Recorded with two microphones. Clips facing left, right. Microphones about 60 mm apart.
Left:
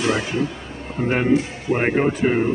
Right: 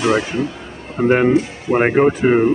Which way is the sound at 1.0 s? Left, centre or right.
Right.